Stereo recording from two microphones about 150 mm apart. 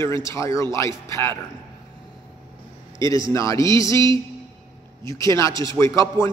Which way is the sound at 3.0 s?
20° left (ahead or behind).